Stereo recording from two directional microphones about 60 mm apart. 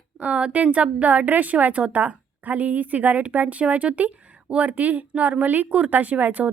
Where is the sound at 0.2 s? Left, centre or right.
Right.